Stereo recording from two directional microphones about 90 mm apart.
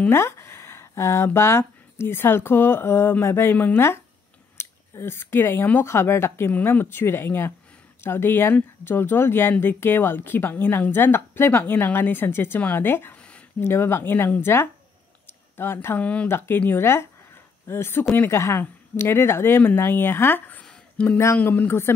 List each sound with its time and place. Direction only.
0.1 s speech: 30° left (ahead or behind)
15.2 s a sound: 25° left (ahead or behind)
16.0 s speech: 15° left (ahead or behind)
16.3 s speech: 25° left (ahead or behind)